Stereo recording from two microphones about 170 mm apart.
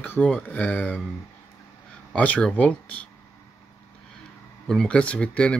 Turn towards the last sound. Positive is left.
turn(degrees=5)  # may be behind; listen again after turning